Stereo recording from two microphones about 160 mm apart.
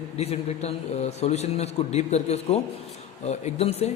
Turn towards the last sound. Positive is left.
turn(degrees=40)  # may be behind; listen again after turning